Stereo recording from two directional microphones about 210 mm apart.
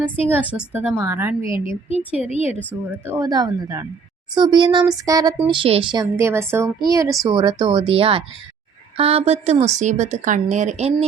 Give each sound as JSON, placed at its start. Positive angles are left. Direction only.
{"t": 0.3, "sound": "a woman's voice", "side_deg": -10}
{"t": 1.4, "sound": "a woman's voice", "side_deg": 25}
{"t": 2.9, "sound": "a woman's voice", "side_deg": -15}